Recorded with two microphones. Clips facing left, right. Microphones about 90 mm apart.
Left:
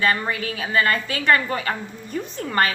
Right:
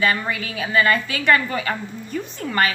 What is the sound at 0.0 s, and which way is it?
A woman's voice, 35° left (ahead or behind).